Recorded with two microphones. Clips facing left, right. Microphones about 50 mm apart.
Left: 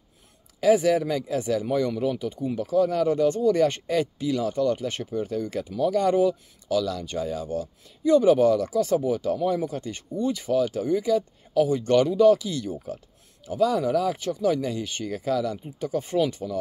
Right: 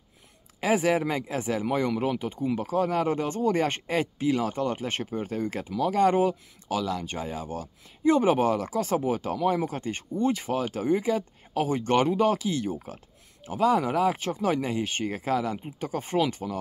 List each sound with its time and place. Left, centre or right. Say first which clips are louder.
0.6 s speech: left 4 dB; right